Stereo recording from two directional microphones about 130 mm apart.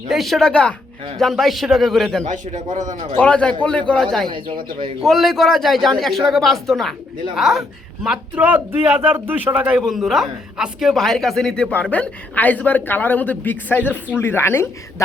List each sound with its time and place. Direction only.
0.1 s speech: centre (ahead or behind)
2.2 s a man's voice: 65° right (ahead or behind)
2.7 s speech: 75° right (ahead or behind)
3.2 s a man's voice: 10° left (ahead or behind)
4.3 s speech: 40° right (ahead or behind)
5.0 s a woman's voice: centre (ahead or behind); by 15.0 s 20° left (ahead or behind)